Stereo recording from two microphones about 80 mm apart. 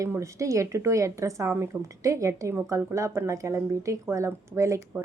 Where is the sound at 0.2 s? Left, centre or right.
Right.